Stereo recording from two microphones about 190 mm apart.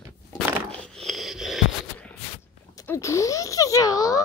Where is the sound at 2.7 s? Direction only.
15° left (ahead or behind).